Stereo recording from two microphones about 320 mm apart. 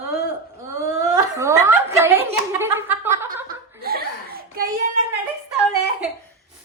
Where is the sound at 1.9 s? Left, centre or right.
Centre.